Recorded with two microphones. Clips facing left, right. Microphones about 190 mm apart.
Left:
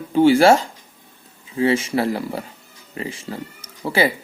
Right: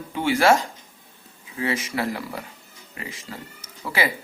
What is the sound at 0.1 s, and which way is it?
Speech, 30° left (ahead or behind).